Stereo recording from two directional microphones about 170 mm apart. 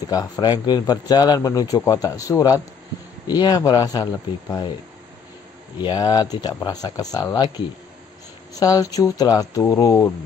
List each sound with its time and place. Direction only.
0.1 s speech: 25° left (ahead or behind)
5.8 s speech: 25° left (ahead or behind)